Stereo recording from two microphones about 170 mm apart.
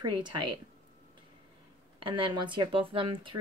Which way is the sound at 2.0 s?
30° right (ahead or behind).